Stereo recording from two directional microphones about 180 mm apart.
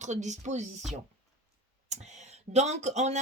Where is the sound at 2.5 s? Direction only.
40° right (ahead or behind).